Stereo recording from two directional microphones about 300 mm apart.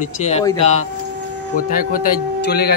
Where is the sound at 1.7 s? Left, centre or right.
Left.